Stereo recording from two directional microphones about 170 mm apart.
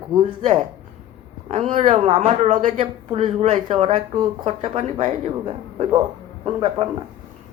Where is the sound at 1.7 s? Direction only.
45° right (ahead or behind).